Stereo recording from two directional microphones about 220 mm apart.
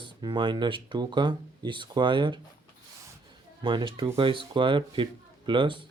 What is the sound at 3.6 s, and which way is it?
Speech, 20° right (ahead or behind).